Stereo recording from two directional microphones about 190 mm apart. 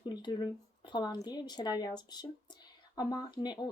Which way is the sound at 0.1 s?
25° left (ahead or behind).